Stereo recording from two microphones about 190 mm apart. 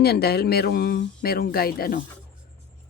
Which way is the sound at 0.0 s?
55° left (ahead or behind).